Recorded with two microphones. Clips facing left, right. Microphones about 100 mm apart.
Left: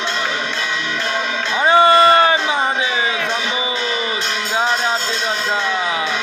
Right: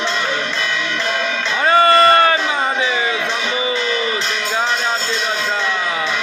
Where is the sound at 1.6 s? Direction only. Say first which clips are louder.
Left 1 dB; 20° left (ahead or behind).